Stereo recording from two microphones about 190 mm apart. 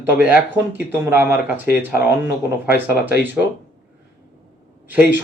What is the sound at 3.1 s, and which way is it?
Speech, 60° left (ahead or behind).